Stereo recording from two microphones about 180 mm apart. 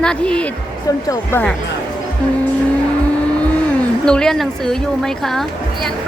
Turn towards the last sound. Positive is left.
turn(degrees=0)  # may be behind; listen again after turning